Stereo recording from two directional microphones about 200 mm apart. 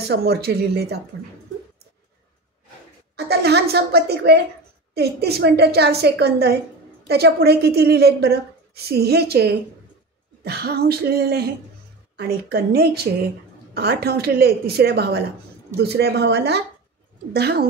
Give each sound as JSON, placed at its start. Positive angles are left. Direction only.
{"t": 0.1, "sound": "a woman's voice", "side_deg": -55}
{"t": 3.2, "sound": "a woman's voice", "side_deg": -55}